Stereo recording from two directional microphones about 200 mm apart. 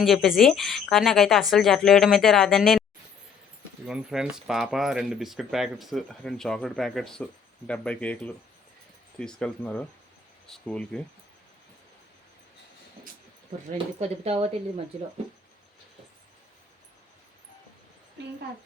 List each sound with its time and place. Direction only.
0.0 s speech: centre (ahead or behind)
3.8 s speech: 5° right (ahead or behind)
13.7 s speech: 30° right (ahead or behind)